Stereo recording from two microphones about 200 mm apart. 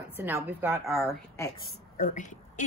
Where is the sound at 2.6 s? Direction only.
40° left (ahead or behind).